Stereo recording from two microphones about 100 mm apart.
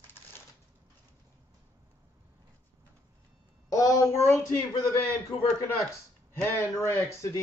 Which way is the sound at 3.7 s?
35° left (ahead or behind).